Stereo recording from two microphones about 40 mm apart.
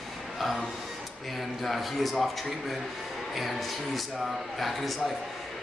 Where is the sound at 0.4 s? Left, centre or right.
Centre.